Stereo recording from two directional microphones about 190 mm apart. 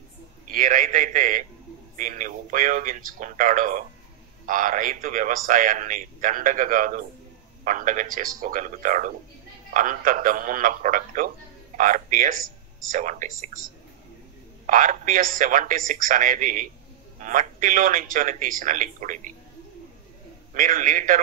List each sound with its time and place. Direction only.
0.5 s a man's voice: 45° right (ahead or behind)
14.7 s a man's voice: 45° right (ahead or behind)
20.5 s a man's voice: 45° right (ahead or behind)